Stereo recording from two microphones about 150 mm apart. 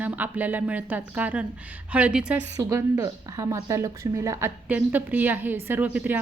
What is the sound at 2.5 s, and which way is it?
Speech, 20° right (ahead or behind).